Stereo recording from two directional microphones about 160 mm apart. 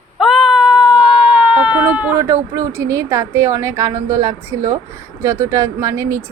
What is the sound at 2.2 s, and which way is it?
A woman's voice, 20° right (ahead or behind).